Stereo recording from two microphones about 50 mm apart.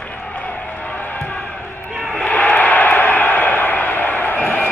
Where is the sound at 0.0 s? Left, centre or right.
Left.